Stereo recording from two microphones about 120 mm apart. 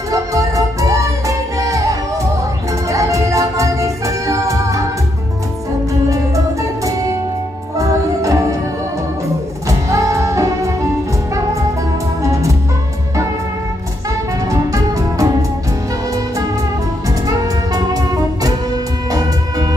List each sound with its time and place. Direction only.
0.1 s music: 25° right (ahead or behind)
6.0 s music: 30° right (ahead or behind)
9.7 s music: 25° right (ahead or behind)
12.2 s music: 25° right (ahead or behind)
14.5 s music: 30° right (ahead or behind)
17.3 s music: 30° right (ahead or behind)